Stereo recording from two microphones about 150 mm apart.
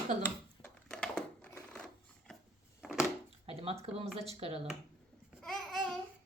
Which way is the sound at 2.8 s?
5° right (ahead or behind).